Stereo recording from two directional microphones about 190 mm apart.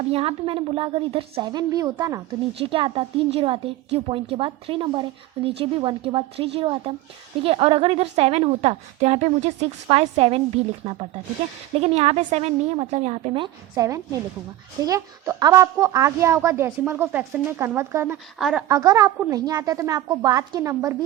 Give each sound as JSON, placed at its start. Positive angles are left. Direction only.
{"t": 0.1, "sound": "a woman's voice", "side_deg": -30}
{"t": 18.7, "sound": "a woman's voice", "side_deg": -20}